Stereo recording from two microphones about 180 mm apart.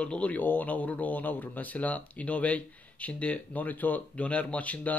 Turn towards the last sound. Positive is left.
turn(degrees=10)  # may be behind; listen again after turning